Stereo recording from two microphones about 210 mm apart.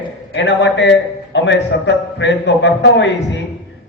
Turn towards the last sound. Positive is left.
turn(degrees=55)  # may be behind; listen again after turning